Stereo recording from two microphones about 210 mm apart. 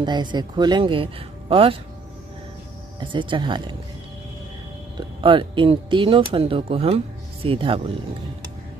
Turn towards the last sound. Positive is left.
turn(degrees=-25)  # may be behind; listen again after turning